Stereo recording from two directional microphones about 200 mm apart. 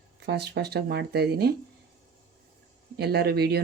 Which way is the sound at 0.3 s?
55° right (ahead or behind).